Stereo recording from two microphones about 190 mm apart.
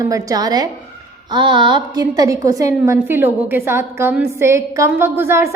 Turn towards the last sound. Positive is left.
turn(degrees=-15)  # may be behind; listen again after turning